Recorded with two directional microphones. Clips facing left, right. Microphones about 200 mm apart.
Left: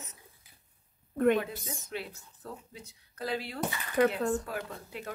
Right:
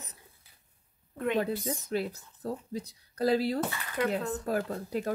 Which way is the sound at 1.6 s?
40° right (ahead or behind).